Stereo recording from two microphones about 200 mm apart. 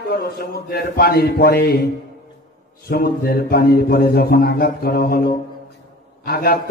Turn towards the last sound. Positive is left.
turn(degrees=50)  # may be behind; listen again after turning